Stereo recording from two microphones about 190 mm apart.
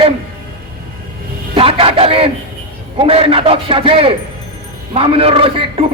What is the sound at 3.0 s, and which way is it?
A man's voice, 30° right (ahead or behind).